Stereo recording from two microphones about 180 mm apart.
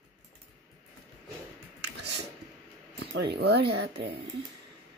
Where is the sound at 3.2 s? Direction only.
65° right (ahead or behind).